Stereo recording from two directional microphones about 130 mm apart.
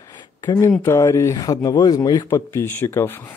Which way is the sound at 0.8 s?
20° left (ahead or behind).